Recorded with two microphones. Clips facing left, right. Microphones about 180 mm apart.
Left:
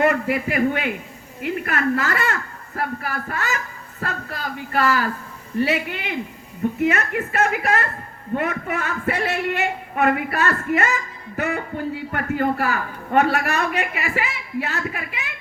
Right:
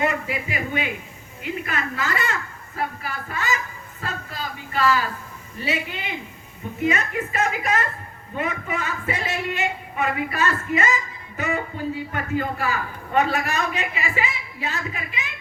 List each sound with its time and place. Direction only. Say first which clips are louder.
0.0 s speech: left 5 dB; 60° left (ahead or behind)